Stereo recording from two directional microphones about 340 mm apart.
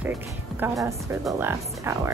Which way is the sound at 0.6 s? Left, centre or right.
Centre.